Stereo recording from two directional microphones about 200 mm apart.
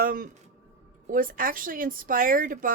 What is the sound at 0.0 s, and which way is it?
A woman's voice, 45° right (ahead or behind).